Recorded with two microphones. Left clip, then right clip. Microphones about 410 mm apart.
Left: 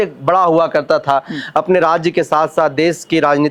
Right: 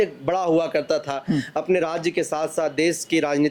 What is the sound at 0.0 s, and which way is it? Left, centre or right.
A man's voice, centre.